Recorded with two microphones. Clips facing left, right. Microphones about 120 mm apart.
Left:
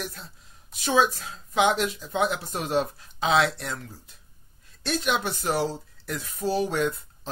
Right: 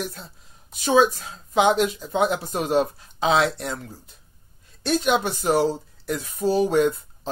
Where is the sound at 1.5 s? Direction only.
35° right (ahead or behind).